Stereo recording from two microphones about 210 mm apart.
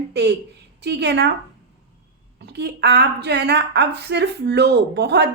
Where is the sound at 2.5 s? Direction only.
50° right (ahead or behind).